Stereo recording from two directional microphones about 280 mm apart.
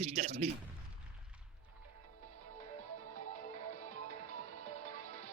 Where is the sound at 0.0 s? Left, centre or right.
Right.